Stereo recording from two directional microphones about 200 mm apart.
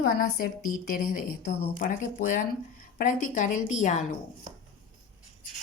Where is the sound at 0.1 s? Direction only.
50° left (ahead or behind).